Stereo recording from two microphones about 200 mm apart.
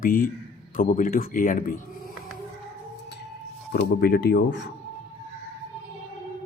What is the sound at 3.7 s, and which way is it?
Speech, 50° left (ahead or behind).